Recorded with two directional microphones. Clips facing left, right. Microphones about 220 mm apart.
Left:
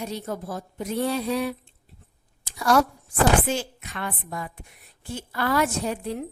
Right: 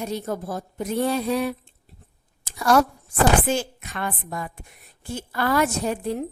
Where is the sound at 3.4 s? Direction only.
50° right (ahead or behind).